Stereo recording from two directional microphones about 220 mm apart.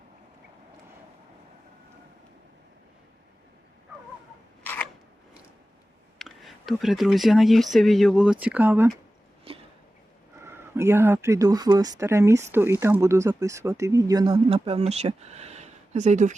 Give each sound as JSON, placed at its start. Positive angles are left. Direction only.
{"t": 4.6, "sound": "camera", "side_deg": 10}
{"t": 6.1, "sound": "speech", "side_deg": 0}
{"t": 9.5, "sound": "a sound", "side_deg": -25}
{"t": 10.4, "sound": "speech", "side_deg": -10}